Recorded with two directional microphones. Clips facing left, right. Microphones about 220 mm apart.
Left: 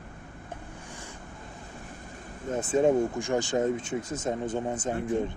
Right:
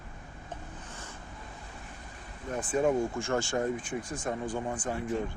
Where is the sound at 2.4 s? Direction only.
25° left (ahead or behind).